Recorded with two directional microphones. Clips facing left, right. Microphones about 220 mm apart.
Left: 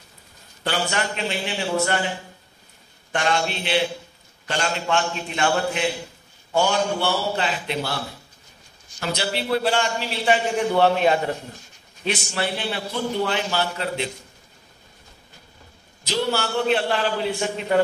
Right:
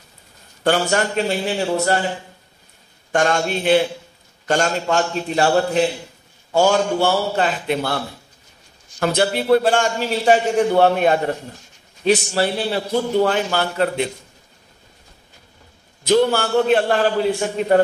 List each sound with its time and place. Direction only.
0.7 s a man's voice: 45° right (ahead or behind)
3.1 s a man's voice: 45° right (ahead or behind)
9.0 s a man's voice: 50° right (ahead or behind)
16.0 s a man's voice: 55° right (ahead or behind)